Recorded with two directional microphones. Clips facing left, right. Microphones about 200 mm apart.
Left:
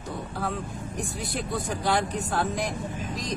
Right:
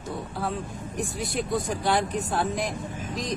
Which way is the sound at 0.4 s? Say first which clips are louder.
Even; centre (ahead or behind).